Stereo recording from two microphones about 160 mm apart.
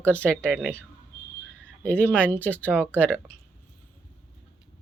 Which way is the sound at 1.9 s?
10° left (ahead or behind).